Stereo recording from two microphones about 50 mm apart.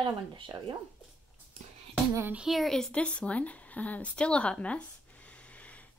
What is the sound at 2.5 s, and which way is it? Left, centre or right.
Speech, centre.